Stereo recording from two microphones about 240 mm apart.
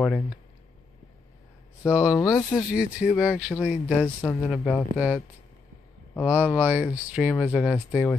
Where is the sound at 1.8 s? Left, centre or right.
Centre.